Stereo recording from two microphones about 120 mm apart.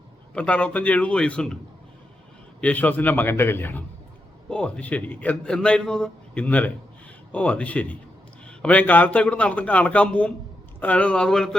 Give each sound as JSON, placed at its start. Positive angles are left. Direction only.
{"t": 0.3, "sound": "a man's voice", "side_deg": 10}
{"t": 2.6, "sound": "a man's voice", "side_deg": 10}